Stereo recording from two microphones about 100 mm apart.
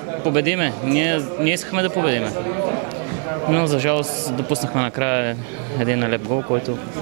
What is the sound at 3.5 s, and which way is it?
Speech, 20° right (ahead or behind).